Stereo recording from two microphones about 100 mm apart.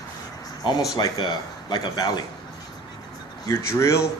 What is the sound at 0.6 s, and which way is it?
Speech, 50° left (ahead or behind).